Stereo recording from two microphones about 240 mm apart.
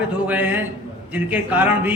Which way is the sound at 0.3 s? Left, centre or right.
Centre.